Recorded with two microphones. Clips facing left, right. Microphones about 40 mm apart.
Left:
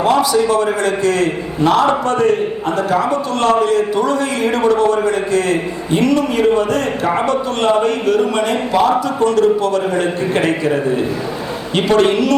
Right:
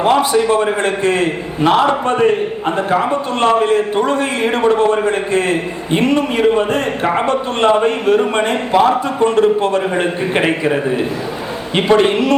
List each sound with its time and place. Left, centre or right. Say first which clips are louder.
0.0 s a man's voice: right 1 dB; right